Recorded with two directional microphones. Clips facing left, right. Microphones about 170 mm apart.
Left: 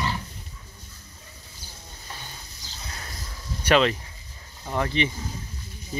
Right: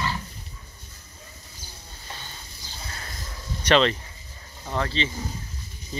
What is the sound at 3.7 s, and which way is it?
Speech, 5° left (ahead or behind).